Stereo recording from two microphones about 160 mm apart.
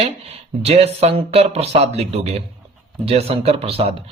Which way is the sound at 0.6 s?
40° right (ahead or behind).